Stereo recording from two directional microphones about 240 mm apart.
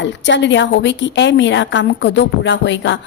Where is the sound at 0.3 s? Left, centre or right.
Left.